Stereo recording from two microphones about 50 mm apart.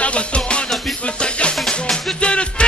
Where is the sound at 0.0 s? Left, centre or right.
Left.